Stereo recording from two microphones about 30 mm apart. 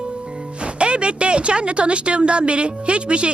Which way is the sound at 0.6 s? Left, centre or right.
Right.